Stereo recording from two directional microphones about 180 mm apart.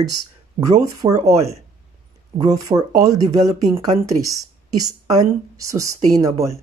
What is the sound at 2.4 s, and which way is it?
A woman's voice, 20° right (ahead or behind).